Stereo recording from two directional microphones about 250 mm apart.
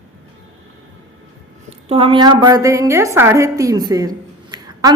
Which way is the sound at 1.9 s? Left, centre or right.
Right.